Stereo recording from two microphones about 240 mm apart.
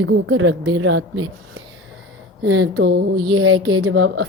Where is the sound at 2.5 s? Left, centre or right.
Right.